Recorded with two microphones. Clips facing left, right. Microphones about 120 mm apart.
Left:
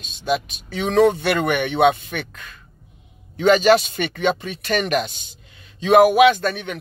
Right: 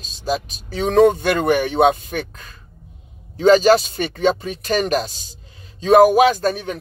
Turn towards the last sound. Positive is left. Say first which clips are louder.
# even
turn(degrees=-35)  # may be behind; listen again after turning